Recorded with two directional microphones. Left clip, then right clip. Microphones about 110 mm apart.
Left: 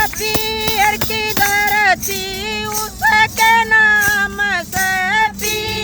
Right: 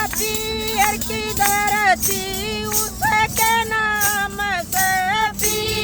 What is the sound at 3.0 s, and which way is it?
Music, 40° left (ahead or behind).